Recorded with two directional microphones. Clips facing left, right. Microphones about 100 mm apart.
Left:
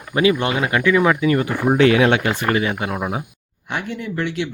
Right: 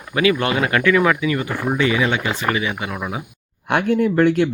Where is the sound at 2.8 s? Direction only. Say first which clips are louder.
Left 3 dB; 45° left (ahead or behind).